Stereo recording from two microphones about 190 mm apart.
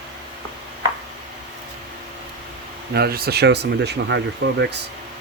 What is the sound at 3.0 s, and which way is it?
Speech, 55° right (ahead or behind).